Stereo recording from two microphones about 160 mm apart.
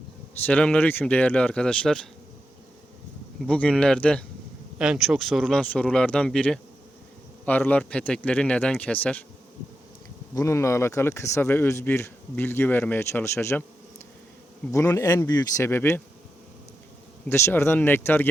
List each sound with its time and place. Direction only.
0.4 s speech: 5° left (ahead or behind)
3.4 s speech: 5° left (ahead or behind)
10.3 s speech: 20° left (ahead or behind)
14.7 s speech: 20° left (ahead or behind)
17.2 s speech: 15° left (ahead or behind)